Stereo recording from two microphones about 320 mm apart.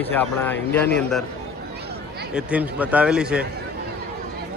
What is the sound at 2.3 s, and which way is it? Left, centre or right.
A man's voice, centre.